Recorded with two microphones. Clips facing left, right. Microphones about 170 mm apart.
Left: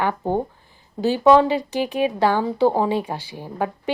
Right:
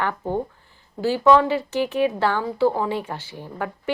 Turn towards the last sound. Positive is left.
turn(degrees=15)  # may be behind; listen again after turning